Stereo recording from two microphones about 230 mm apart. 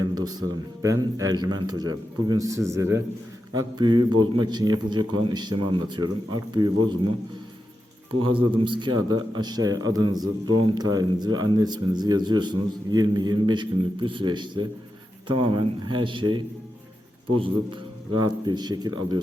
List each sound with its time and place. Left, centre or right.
0.2 s speech: centre
8.2 s speech: right